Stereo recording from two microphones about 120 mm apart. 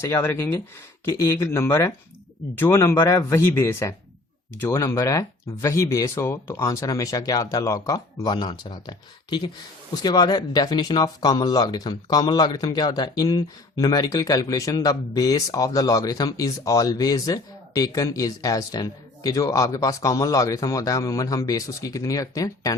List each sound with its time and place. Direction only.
0.0 s speech: 20° left (ahead or behind)